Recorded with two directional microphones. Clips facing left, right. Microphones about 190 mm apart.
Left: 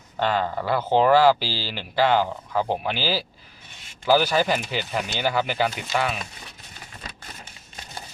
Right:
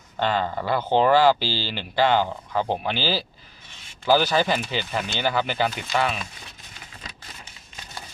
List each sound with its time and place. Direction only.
0.2 s speech: 5° left (ahead or behind)